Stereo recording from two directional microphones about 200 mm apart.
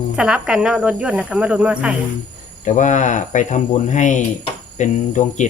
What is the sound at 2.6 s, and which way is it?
Speech, 35° left (ahead or behind).